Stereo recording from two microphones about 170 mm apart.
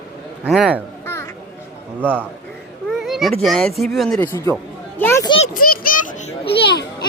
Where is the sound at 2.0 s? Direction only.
10° left (ahead or behind).